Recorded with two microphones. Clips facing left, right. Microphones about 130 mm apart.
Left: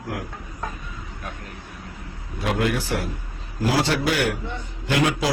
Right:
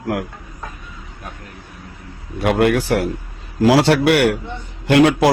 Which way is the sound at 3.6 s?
85° right.